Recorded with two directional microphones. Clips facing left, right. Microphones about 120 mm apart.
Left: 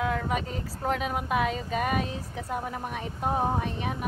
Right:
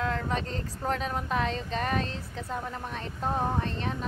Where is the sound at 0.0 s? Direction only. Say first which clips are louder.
Left 2 dB; 10° left (ahead or behind).